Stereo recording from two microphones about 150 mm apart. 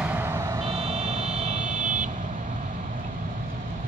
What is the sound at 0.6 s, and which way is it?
Vehicle, 40° right (ahead or behind).